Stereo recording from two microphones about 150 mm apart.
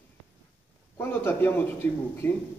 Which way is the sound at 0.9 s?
15° left (ahead or behind).